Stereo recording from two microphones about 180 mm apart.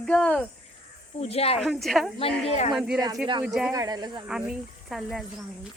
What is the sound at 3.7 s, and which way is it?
Speech, 20° right (ahead or behind).